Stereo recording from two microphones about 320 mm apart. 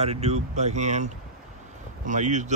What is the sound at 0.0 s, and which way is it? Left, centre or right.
A man's voice, centre.